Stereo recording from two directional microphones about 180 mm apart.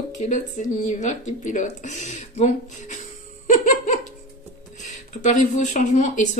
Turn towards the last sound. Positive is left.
turn(degrees=40)  # may be behind; listen again after turning